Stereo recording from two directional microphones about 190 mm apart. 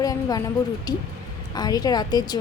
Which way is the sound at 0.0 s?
20° left (ahead or behind).